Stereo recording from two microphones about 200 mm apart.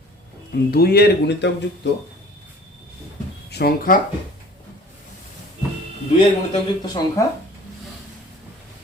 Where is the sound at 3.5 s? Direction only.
50° left (ahead or behind).